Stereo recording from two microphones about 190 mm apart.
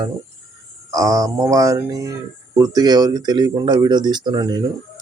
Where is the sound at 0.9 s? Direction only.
20° right (ahead or behind).